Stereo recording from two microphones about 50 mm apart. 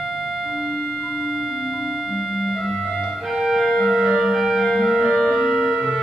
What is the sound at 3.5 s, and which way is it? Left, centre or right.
Music, centre.